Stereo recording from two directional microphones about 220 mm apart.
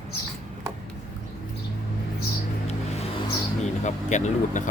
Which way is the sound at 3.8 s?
35° left (ahead or behind).